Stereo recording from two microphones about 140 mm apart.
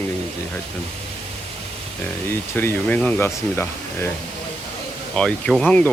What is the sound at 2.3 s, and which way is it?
Speech, 15° left (ahead or behind).